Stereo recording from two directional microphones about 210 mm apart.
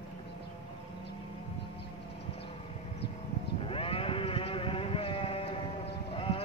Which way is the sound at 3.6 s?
25° left (ahead or behind).